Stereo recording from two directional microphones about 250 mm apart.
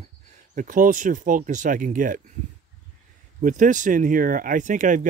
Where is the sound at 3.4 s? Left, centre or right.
Right.